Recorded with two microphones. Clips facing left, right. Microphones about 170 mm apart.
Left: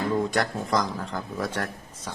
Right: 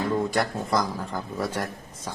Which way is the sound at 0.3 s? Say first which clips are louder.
Even; 5° right (ahead or behind).